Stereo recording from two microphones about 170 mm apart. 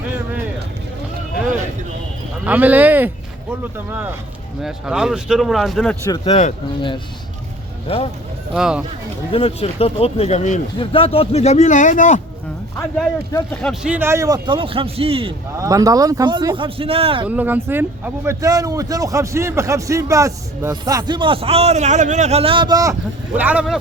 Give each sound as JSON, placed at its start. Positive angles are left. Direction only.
{"t": 2.4, "sound": "speech", "side_deg": -10}
{"t": 6.2, "sound": "speech", "side_deg": 40}
{"t": 8.5, "sound": "speech", "side_deg": -5}
{"t": 9.3, "sound": "speech", "side_deg": 35}
{"t": 13.6, "sound": "speech", "side_deg": 5}
{"t": 13.9, "sound": "speech", "side_deg": -15}
{"t": 15.5, "sound": "speech", "side_deg": -20}
{"t": 17.2, "sound": "speech", "side_deg": -10}